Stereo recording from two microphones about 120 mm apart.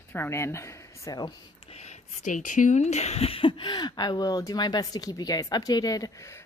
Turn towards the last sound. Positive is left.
turn(degrees=25)  # may be behind; listen again after turning